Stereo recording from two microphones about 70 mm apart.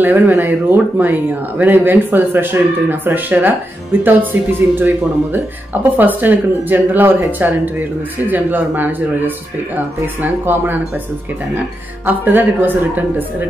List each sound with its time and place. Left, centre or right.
0.0 s speech: right
12.1 s speech: right